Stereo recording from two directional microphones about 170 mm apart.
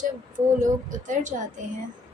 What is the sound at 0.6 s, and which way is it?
Speech, 50° right (ahead or behind).